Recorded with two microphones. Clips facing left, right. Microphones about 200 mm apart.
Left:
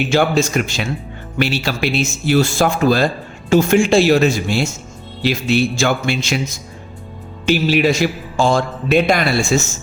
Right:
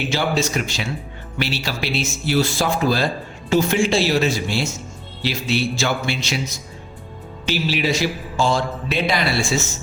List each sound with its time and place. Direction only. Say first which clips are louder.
0.1 s a man's voice: left 6 dB; 50° left (ahead or behind)